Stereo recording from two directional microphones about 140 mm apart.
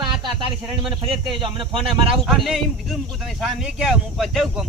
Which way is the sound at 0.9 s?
40° right (ahead or behind).